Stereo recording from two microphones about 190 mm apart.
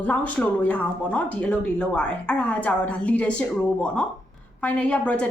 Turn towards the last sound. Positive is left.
turn(degrees=5)  # may be behind; listen again after turning